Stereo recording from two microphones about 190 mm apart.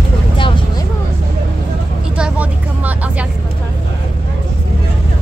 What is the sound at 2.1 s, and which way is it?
Vehicle, 5° right (ahead or behind).